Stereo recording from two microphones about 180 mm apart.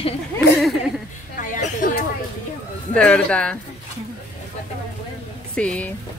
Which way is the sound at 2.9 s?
5° left (ahead or behind).